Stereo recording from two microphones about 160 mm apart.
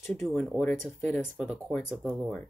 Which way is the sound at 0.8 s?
15° left (ahead or behind).